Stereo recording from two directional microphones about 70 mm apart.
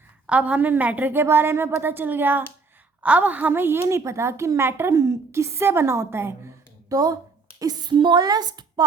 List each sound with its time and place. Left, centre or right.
0.3 s a woman's voice: centre
3.5 s a woman's voice: right
4.9 s a woman's voice: right
6.9 s speech: right
7.6 s a woman's voice: right